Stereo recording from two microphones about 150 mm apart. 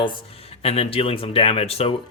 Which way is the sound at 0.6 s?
40° left (ahead or behind).